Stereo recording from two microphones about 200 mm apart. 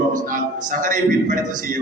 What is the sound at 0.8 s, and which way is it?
Speech, 40° right (ahead or behind).